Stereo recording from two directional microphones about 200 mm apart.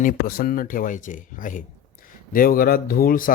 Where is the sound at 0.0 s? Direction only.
45° left (ahead or behind).